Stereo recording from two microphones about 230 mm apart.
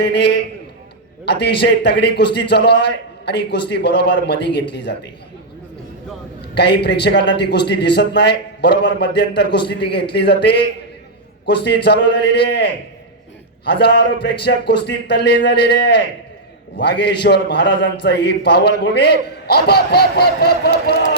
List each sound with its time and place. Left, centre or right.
0.0 s a man's voice: left
6.5 s a man's voice: left